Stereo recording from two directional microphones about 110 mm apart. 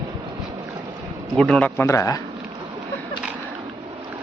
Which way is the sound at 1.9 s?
30° left (ahead or behind).